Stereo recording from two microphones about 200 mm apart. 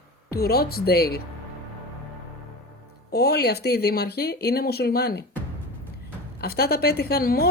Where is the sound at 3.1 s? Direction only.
55° left (ahead or behind).